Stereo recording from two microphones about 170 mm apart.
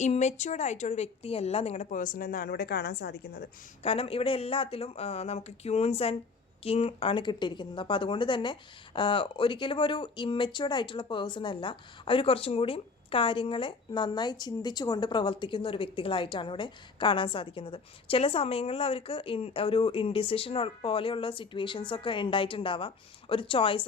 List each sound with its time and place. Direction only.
0.0 s speech: 40° left (ahead or behind); by 3.5 s 65° left (ahead or behind)
3.8 s speech: 35° left (ahead or behind)